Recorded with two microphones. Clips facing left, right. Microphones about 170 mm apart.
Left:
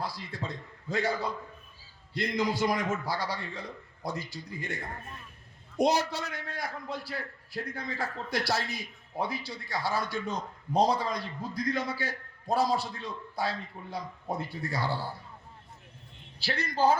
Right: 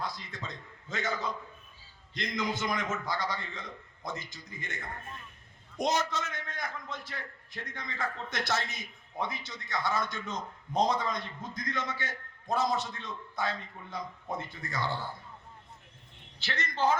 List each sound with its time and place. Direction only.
0.0 s a man's voice: 35° left (ahead or behind)
2.3 s a man's voice: 35° left (ahead or behind)
5.8 s a man's voice: 35° left (ahead or behind)
16.4 s a man's voice: 35° left (ahead or behind)